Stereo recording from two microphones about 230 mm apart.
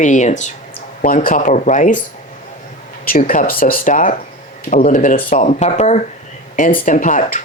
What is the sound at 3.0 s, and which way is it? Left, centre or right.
Speech, left.